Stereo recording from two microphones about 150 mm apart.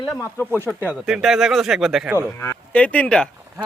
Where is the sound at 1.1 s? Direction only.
5° right (ahead or behind).